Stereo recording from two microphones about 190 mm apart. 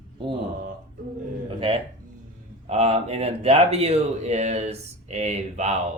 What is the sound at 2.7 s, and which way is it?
A man's voice, 35° right (ahead or behind).